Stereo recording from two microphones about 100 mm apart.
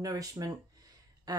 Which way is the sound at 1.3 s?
40° right (ahead or behind).